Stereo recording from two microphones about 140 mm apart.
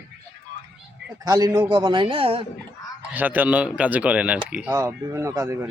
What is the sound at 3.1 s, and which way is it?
Speech, 10° right (ahead or behind).